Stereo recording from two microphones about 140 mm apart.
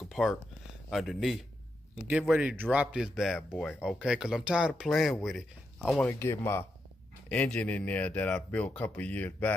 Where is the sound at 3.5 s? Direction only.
10° left (ahead or behind).